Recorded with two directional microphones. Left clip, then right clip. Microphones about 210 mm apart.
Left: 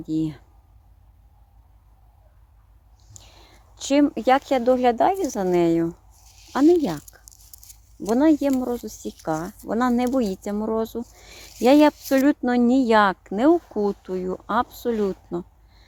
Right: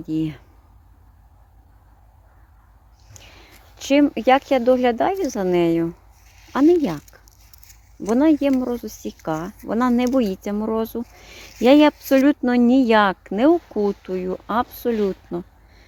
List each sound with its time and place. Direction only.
0.0 s speech: 5° right (ahead or behind)
3.1 s speech: 5° right (ahead or behind)
6.2 s a sound: 35° left (ahead or behind)
8.0 s speech: 10° right (ahead or behind)